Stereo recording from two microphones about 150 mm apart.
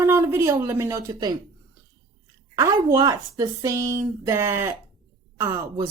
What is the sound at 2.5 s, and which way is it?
Speech, 20° right (ahead or behind).